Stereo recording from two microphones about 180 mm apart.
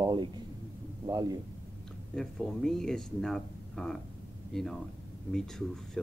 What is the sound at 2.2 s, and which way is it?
Speech, 5° left (ahead or behind).